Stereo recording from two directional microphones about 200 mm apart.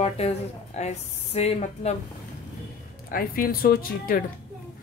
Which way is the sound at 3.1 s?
45° left (ahead or behind).